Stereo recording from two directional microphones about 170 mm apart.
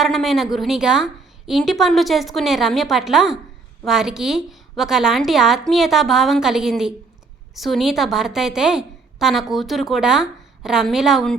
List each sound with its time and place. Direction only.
0.0 s a woman's voice: centre (ahead or behind)